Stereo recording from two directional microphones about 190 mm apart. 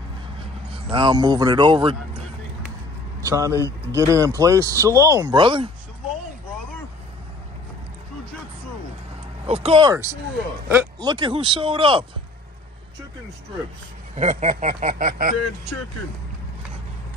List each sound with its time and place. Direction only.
0.9 s speech: 25° right (ahead or behind)
3.2 s speech: 15° right (ahead or behind)
9.5 s speech: 30° right (ahead or behind)
14.1 s a sound: 40° right (ahead or behind)